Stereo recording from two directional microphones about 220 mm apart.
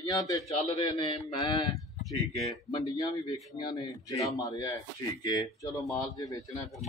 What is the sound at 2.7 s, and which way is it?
A man's voice, 15° left (ahead or behind).